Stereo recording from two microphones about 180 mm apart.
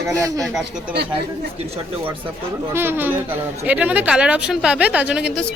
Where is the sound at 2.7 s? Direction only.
10° right (ahead or behind).